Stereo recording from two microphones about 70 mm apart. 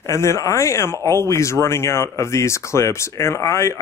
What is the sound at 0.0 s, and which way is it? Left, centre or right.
Speech, left.